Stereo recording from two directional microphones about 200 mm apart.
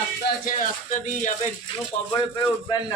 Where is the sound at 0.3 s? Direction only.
40° left (ahead or behind).